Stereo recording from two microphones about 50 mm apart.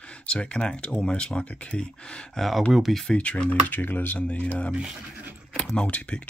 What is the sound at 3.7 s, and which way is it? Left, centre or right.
Speech, left.